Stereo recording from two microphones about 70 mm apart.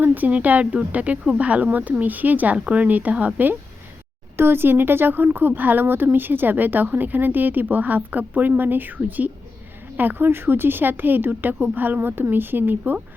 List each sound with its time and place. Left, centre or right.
0.0 s speech: right